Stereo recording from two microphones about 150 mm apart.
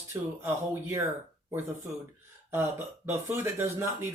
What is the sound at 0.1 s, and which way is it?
Speech, 15° right (ahead or behind).